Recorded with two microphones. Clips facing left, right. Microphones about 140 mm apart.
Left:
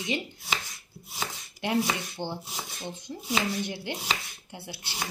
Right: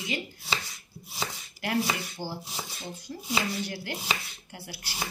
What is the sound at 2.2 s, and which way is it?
Speech, 20° left (ahead or behind).